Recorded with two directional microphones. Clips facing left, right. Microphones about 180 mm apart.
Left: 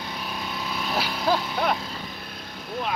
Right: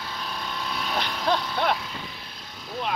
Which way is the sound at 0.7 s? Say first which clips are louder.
Left 2 dB; 5° left (ahead or behind).